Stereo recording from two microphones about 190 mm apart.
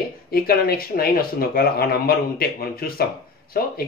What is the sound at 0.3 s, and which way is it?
Speech, 50° left (ahead or behind).